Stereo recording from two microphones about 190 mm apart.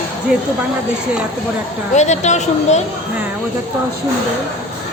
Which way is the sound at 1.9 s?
40° left (ahead or behind).